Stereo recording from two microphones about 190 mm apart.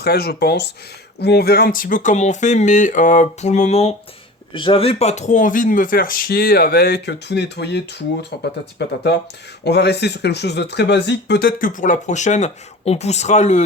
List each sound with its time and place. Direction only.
0.0 s speech: 55° left (ahead or behind); by 13.7 s 35° left (ahead or behind)